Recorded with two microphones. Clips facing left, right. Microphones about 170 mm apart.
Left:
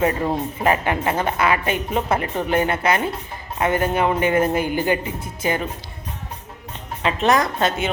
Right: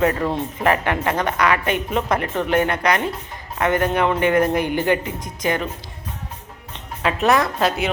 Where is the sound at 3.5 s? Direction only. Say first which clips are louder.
Right 1 dB; 30° left (ahead or behind).